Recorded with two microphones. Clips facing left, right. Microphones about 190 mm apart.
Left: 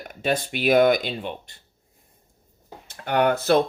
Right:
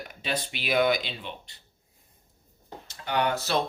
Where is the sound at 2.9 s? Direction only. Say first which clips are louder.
Left 6 dB; 55° left (ahead or behind).